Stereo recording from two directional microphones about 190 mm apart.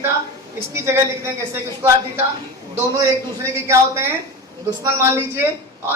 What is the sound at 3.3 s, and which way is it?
Speech, 15° right (ahead or behind).